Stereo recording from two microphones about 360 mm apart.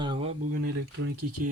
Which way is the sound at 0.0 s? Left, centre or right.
Centre.